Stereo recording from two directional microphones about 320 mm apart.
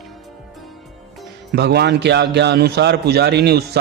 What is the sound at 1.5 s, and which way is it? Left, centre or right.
Speech, right.